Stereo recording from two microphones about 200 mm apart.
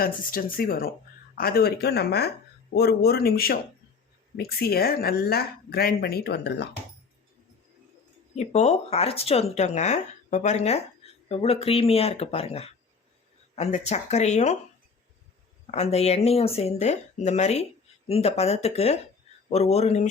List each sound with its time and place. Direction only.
0.0 s speech: 45° left (ahead or behind)
8.4 s speech: 35° left (ahead or behind)
15.7 s speech: 30° left (ahead or behind)